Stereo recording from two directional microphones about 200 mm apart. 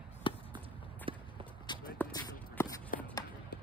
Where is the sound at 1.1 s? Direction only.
25° right (ahead or behind).